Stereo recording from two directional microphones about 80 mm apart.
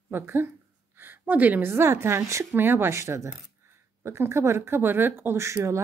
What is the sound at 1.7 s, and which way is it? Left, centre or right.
A woman's voice, right.